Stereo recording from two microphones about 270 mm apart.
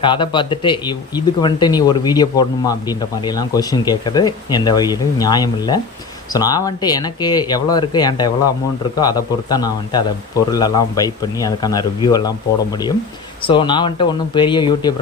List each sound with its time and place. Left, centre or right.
0.0 s speech: centre
13.5 s speech: centre